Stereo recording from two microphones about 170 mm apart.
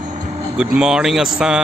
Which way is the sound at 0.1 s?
45° right (ahead or behind).